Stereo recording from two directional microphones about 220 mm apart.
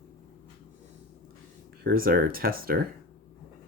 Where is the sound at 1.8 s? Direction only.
40° right (ahead or behind).